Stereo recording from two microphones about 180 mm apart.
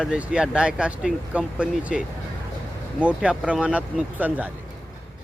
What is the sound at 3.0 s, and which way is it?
Speech, 5° right (ahead or behind).